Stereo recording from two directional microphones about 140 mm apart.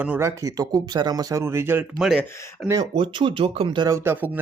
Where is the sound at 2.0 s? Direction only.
Centre (ahead or behind).